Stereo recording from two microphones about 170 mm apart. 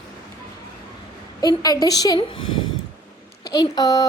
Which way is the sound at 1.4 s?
25° left (ahead or behind).